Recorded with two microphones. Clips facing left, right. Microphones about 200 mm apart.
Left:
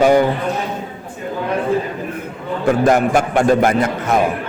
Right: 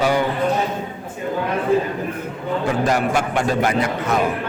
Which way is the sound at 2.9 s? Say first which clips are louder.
Left 5 dB; 50° left (ahead or behind).